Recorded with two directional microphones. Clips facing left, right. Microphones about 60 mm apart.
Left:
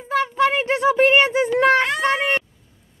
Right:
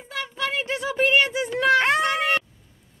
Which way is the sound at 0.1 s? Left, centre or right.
Left.